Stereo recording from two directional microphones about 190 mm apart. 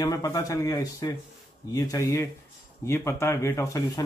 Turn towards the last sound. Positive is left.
turn(degrees=15)  # may be behind; listen again after turning